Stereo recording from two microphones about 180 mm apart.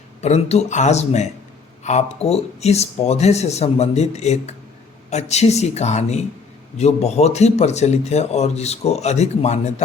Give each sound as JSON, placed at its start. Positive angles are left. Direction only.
{"t": 0.2, "sound": "speech", "side_deg": 35}